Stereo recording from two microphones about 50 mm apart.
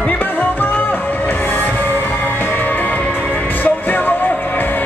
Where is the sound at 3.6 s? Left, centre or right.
Left.